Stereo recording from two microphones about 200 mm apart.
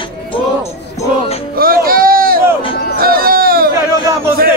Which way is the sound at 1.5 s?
45° right (ahead or behind).